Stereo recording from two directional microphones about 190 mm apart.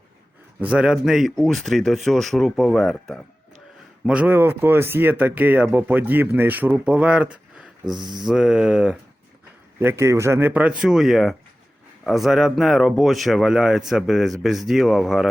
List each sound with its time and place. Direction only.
0.6 s speech: 5° right (ahead or behind)
7.9 s mantra: 20° right (ahead or behind)
8.2 s speech: 5° right (ahead or behind)
9.8 s speech: 15° right (ahead or behind)